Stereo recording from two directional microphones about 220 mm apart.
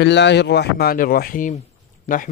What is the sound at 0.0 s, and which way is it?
A man's voice, 50° left (ahead or behind).